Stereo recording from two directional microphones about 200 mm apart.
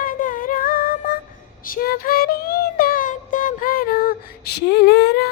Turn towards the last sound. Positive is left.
turn(degrees=55)  # may be behind; listen again after turning